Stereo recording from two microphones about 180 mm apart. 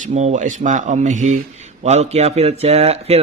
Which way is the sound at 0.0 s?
40° right (ahead or behind).